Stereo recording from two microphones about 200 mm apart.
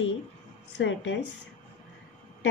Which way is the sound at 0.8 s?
70° left (ahead or behind).